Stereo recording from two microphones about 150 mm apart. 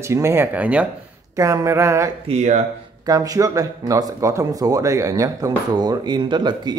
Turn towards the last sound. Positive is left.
turn(degrees=-30)  # may be behind; listen again after turning